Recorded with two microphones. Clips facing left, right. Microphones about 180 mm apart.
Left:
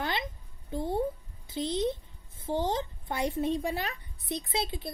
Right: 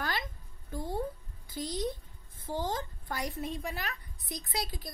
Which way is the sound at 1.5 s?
25° left (ahead or behind).